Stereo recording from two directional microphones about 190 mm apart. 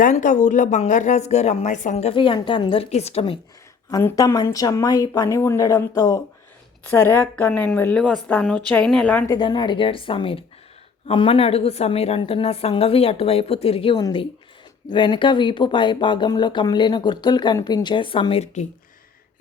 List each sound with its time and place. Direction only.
0.0 s speech: 40° left (ahead or behind)
3.9 s speech: 20° left (ahead or behind)
9.3 s speech: 20° left (ahead or behind)